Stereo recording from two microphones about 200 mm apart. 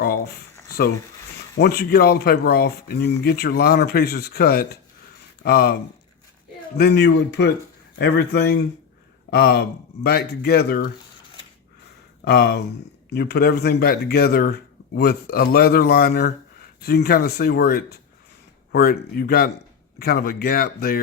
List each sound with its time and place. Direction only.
1.5 s speech: 50° left (ahead or behind)
6.7 s speech: 55° left (ahead or behind)
12.2 s speech: 55° left (ahead or behind)